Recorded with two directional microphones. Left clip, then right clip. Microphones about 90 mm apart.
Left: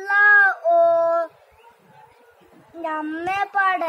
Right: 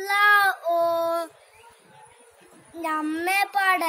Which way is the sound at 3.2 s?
15° right (ahead or behind).